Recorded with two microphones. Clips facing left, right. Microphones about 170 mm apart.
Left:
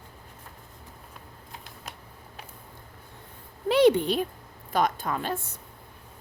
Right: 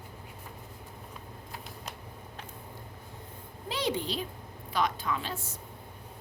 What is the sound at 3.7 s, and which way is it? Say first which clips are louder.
A woman's voice: left 12 dB; 60° left (ahead or behind).